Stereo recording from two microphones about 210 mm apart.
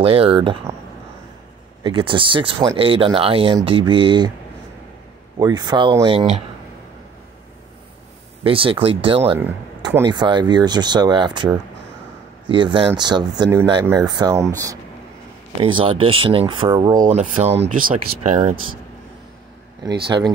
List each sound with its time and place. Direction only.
0.0 s speech: 25° right (ahead or behind)
1.8 s speech: 25° right (ahead or behind)
5.4 s speech: 20° right (ahead or behind)
8.5 s speech: 25° right (ahead or behind)
15.6 s speech: 25° right (ahead or behind)
17.0 s speech: 35° right (ahead or behind)
19.8 s speech: 20° right (ahead or behind)